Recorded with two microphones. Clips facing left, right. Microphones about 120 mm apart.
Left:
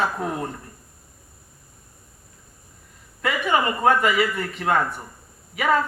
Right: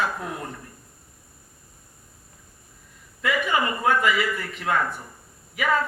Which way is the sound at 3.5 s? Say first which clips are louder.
Left 5 dB; 30° left (ahead or behind).